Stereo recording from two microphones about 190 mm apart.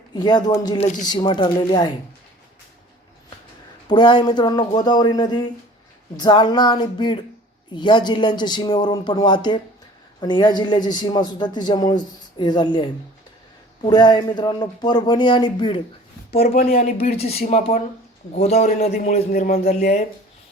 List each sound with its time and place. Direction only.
0.1 s a man's voice: 20° left (ahead or behind)
0.8 s a man's voice: 40° left (ahead or behind)
1.0 s a man's voice: 20° left (ahead or behind)
3.8 s a man's voice: 25° left (ahead or behind)
17.0 s a man's voice: 35° left (ahead or behind)
19.3 s speech: 50° left (ahead or behind)